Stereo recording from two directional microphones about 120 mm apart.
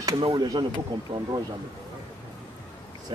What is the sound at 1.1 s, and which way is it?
Speech, 55° right (ahead or behind).